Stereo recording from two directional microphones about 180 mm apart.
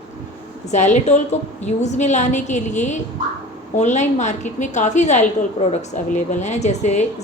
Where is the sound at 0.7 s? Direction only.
40° left (ahead or behind).